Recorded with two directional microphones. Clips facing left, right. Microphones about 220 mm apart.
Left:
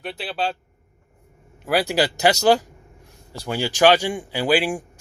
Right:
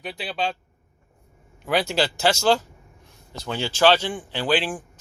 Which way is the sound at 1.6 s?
10° left (ahead or behind).